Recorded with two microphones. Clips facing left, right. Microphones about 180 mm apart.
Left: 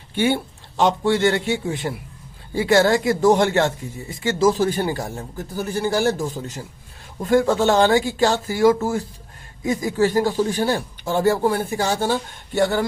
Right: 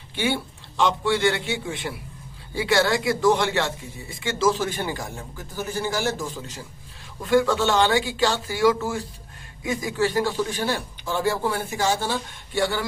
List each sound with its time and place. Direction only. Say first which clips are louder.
0.8 s speech: left 4 dB; 45° left (ahead or behind)